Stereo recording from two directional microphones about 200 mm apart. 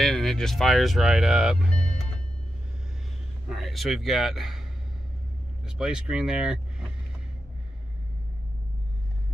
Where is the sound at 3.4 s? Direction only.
Centre (ahead or behind).